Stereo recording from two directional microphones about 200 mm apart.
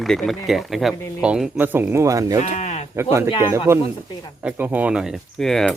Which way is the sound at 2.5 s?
35° left (ahead or behind).